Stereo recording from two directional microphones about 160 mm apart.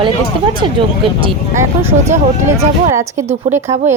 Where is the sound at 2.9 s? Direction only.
15° right (ahead or behind).